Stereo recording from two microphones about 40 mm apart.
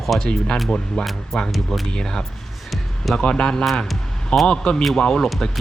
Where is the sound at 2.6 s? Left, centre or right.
Centre.